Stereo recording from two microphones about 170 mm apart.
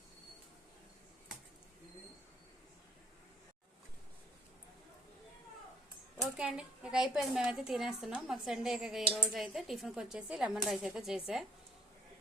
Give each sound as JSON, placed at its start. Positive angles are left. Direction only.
{"t": 6.1, "sound": "speech", "side_deg": -5}